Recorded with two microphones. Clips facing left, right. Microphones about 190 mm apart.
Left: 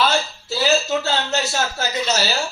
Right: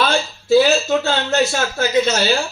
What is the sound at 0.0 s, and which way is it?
A man's voice, 55° right (ahead or behind).